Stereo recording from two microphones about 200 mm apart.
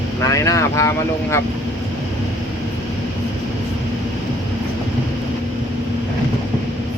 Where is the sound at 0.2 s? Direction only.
15° left (ahead or behind).